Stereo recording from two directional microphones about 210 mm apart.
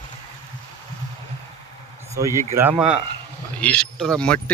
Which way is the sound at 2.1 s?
15° right (ahead or behind).